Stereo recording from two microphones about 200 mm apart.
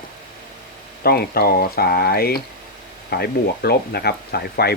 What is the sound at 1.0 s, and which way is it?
Speech, 50° left (ahead or behind).